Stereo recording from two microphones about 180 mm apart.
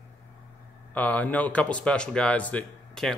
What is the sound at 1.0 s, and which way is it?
Speech, 10° left (ahead or behind).